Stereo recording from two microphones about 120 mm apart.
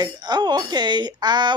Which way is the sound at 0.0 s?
35° right (ahead or behind).